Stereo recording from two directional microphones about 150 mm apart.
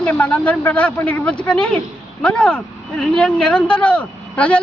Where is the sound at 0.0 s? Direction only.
10° left (ahead or behind).